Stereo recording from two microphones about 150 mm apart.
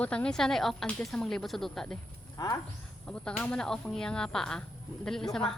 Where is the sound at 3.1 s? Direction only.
5° left (ahead or behind).